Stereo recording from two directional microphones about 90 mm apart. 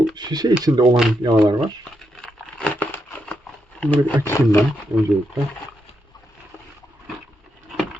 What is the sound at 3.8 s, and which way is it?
Speech, 15° left (ahead or behind).